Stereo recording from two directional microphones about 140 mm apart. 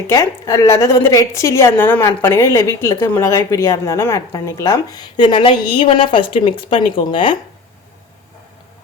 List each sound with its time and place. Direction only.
0.1 s a woman's voice: 20° left (ahead or behind)